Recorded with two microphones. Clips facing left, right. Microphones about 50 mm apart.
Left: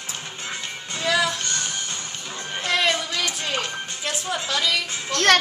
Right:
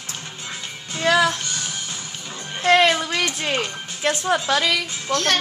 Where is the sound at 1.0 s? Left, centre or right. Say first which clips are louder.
Right 4 dB; right.